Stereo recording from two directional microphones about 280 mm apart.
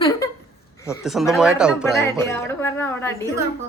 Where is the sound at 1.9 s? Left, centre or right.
Centre.